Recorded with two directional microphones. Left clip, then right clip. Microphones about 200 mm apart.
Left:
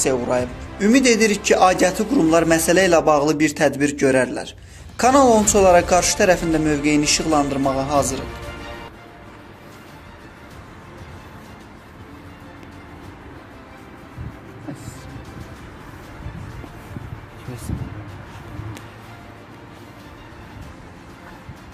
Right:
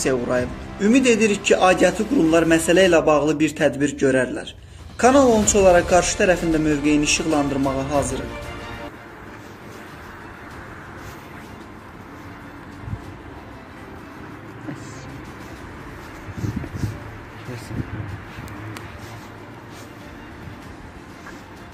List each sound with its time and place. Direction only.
0.0 s speech: 5° left (ahead or behind)
0.7 s a man's voice: 20° left (ahead or behind)